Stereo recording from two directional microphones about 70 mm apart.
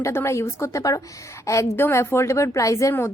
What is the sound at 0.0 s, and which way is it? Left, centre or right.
A woman's voice, left.